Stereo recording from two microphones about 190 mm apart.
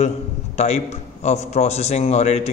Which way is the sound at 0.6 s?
35° left (ahead or behind).